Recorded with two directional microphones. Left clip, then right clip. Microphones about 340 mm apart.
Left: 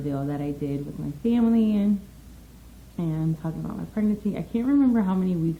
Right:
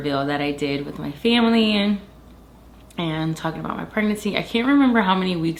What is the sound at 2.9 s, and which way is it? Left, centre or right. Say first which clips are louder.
Speech: right 6 dB; centre.